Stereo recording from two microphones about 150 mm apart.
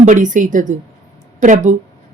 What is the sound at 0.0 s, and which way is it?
A woman's voice, 55° right (ahead or behind).